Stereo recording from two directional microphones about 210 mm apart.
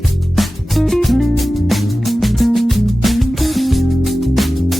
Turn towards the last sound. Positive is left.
turn(degrees=0)  # may be behind; listen again after turning